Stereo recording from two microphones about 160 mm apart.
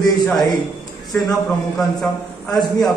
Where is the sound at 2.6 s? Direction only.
25° left (ahead or behind).